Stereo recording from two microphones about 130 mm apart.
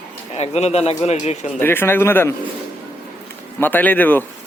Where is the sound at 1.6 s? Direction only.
15° left (ahead or behind).